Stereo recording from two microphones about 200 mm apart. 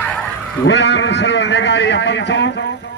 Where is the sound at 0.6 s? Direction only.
60° left (ahead or behind).